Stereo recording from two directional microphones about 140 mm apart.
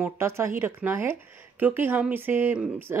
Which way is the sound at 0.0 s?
20° right (ahead or behind).